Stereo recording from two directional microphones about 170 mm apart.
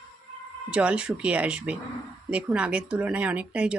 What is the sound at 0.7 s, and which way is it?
Speech, 5° right (ahead or behind).